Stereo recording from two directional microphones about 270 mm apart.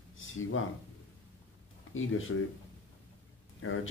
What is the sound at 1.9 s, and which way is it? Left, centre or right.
Speech, left.